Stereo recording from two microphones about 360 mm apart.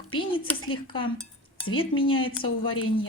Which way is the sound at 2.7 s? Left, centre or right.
Left.